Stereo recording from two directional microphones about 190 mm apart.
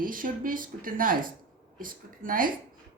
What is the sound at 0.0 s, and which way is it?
A woman's voice, 45° right (ahead or behind).